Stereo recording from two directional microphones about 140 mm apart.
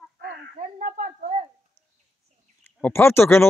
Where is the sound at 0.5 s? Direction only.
65° right (ahead or behind).